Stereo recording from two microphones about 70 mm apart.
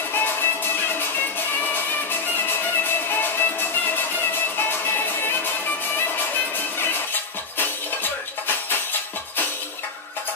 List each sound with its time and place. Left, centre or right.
0.1 s music: left
2.3 s music: left
7.5 s music: left